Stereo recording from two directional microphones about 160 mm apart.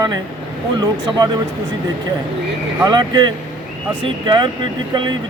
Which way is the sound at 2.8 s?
25° right (ahead or behind).